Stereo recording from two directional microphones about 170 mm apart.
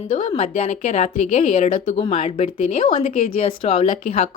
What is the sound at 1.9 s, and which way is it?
A woman's voice, 40° left (ahead or behind).